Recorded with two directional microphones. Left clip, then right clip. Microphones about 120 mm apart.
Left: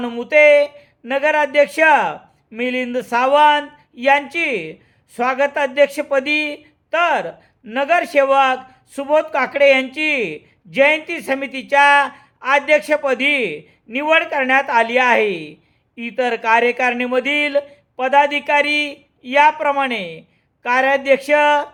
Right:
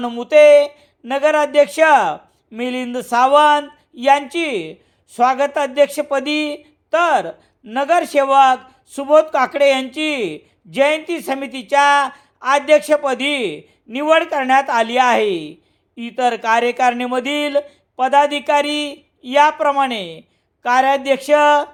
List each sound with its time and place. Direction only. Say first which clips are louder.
0.0 s speech: right 2 dB; 30° right (ahead or behind)